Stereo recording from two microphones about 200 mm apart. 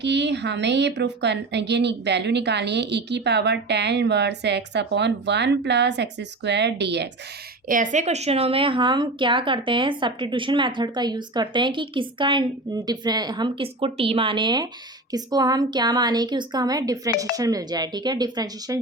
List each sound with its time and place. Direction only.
0.0 s speech: 60° right (ahead or behind)
7.7 s a woman's voice: 40° right (ahead or behind); by 18.8 s 20° right (ahead or behind)